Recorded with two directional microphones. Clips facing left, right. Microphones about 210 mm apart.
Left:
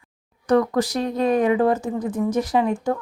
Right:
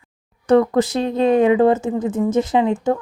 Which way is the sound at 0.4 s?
25° right (ahead or behind).